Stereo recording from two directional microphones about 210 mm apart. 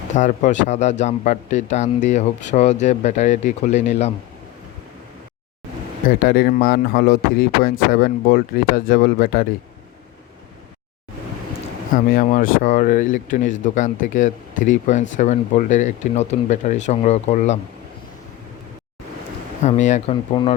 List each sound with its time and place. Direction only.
0.2 s speech: 35° left (ahead or behind)
6.1 s speech: 45° left (ahead or behind)
11.9 s speech: 40° left (ahead or behind)
19.6 s speech: 35° left (ahead or behind)
20.3 s speech: 20° left (ahead or behind)